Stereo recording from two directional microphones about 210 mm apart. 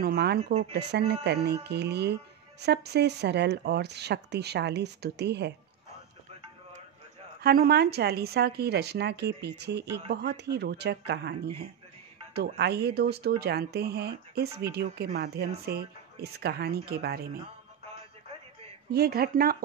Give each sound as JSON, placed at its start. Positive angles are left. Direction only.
{"t": 0.0, "sound": "speech", "side_deg": -50}
{"t": 7.4, "sound": "speech", "side_deg": -45}
{"t": 12.4, "sound": "speech", "side_deg": -50}
{"t": 18.9, "sound": "speech", "side_deg": -50}